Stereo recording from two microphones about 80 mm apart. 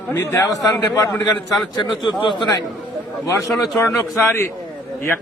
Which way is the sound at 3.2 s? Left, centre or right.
Left.